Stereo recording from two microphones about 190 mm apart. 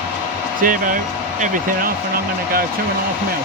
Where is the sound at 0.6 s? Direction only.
45° right (ahead or behind).